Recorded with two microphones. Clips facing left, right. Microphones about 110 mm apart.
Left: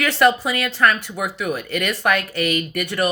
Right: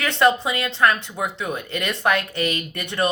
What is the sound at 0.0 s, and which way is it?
Speech, 25° right (ahead or behind).